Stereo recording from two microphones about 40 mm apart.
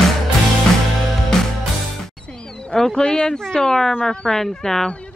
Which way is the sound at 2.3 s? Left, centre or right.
Left.